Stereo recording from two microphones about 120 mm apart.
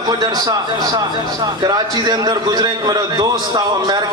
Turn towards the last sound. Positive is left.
turn(degrees=-35)  # may be behind; listen again after turning